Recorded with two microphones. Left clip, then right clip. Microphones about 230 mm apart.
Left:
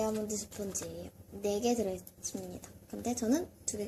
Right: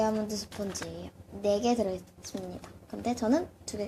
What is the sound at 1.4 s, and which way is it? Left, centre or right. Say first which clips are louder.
Speech: right 5 dB; centre.